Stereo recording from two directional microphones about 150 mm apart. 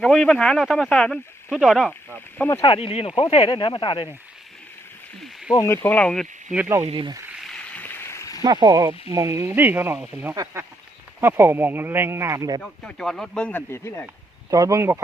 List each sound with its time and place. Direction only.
0.0 s speech: 5° left (ahead or behind)
2.1 s speech: 10° left (ahead or behind)
2.6 s speech: 40° left (ahead or behind)
5.5 s speech: 15° left (ahead or behind)
6.8 s speech: 35° right (ahead or behind)
7.3 s a sound: 5° left (ahead or behind); by 8.4 s 20° left (ahead or behind)
8.4 s speech: 25° right (ahead or behind)
12.6 s speech: 5° left (ahead or behind)
14.5 s speech: 20° right (ahead or behind)